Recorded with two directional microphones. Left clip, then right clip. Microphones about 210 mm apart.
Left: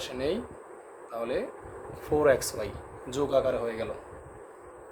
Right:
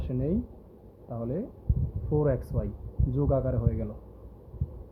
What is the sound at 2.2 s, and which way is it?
Speech, 15° right (ahead or behind).